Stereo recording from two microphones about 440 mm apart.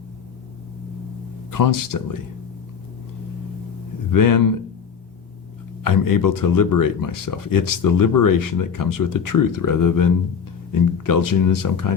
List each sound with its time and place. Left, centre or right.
1.5 s speech: left
4.1 s speech: left
5.8 s speech: left